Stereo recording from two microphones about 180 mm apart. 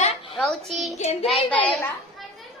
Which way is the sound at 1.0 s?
40° left (ahead or behind).